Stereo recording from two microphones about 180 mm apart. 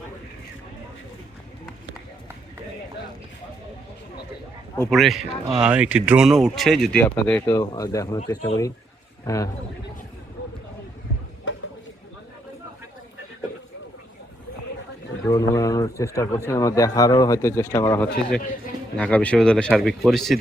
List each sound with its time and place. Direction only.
4.9 s speech: centre (ahead or behind); by 8.2 s 20° left (ahead or behind)
8.2 s speech: 30° left (ahead or behind)
9.2 s speech: 15° left (ahead or behind)
15.3 s speech: 20° left (ahead or behind); by 20.4 s centre (ahead or behind)